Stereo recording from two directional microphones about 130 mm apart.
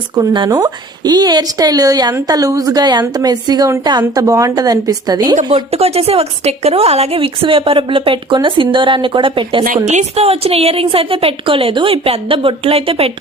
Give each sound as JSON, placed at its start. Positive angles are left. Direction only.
{"t": 0.3, "sound": "speech", "side_deg": -30}
{"t": 5.5, "sound": "a woman's voice", "side_deg": -45}
{"t": 9.6, "sound": "a woman's voice", "side_deg": -65}